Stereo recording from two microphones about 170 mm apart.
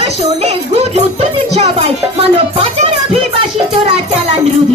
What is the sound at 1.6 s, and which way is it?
Music, 35° right (ahead or behind).